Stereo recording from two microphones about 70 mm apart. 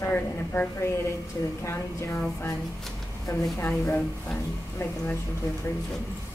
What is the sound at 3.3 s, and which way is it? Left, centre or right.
Speech, left.